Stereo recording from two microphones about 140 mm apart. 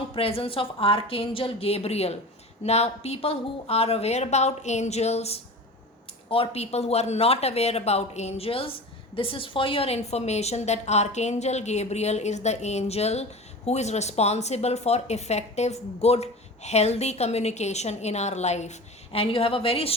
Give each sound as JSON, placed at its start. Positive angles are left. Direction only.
{"t": 0.1, "sound": "speech", "side_deg": 45}